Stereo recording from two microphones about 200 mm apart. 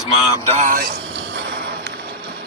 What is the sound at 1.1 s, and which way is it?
Music, 55° right (ahead or behind).